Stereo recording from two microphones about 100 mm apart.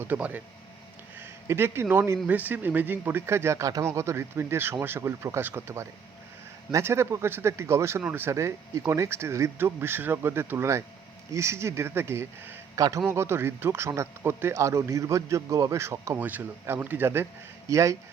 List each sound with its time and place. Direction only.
0.0 s speech: 20° right (ahead or behind)